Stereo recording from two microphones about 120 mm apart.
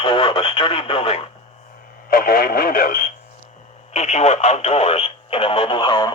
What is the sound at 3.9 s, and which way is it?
Speech, 65° left (ahead or behind).